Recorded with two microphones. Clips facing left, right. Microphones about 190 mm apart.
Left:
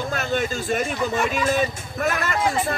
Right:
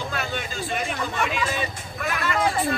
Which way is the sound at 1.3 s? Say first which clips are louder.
Left 5 dB; 45° left (ahead or behind).